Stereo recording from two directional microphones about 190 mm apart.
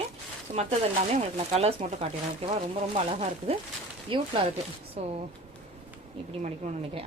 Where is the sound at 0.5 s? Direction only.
35° right (ahead or behind).